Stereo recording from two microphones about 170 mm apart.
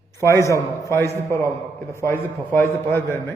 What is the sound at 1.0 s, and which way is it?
A man's voice, 15° left (ahead or behind).